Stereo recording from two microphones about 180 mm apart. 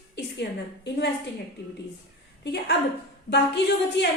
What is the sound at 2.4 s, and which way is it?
A woman's voice, 70° left (ahead or behind).